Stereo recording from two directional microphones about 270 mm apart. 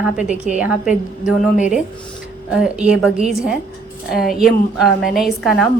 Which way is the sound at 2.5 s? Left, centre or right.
Centre.